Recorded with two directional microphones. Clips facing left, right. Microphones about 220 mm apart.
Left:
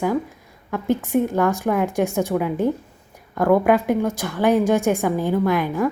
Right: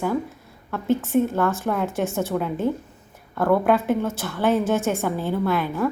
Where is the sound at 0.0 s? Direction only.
15° left (ahead or behind).